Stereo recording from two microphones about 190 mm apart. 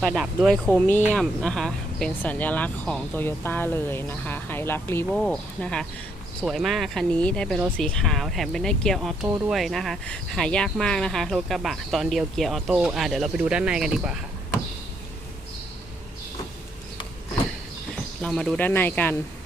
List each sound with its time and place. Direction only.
0.0 s speech: centre (ahead or behind)
5.0 s speech: centre (ahead or behind)
18.2 s speech: centre (ahead or behind)